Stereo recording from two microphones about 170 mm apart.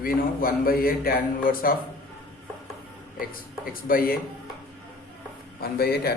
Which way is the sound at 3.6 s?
60° left (ahead or behind).